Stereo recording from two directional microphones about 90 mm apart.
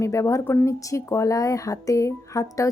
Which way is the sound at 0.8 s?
35° left (ahead or behind).